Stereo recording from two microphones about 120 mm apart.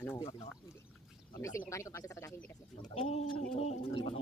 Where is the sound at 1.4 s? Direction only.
25° left (ahead or behind).